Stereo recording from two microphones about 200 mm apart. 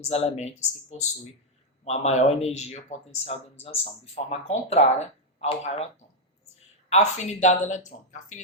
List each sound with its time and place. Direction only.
0.1 s speech: 30° left (ahead or behind)
6.9 s speech: 35° left (ahead or behind)